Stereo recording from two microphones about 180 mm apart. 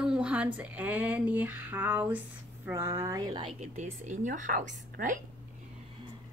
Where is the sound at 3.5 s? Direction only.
40° right (ahead or behind).